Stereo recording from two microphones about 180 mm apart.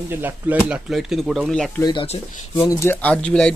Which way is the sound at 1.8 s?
30° left (ahead or behind).